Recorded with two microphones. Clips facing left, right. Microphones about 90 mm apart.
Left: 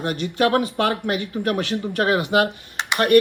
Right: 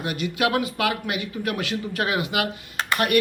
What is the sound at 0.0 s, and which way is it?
Speech, 40° left (ahead or behind).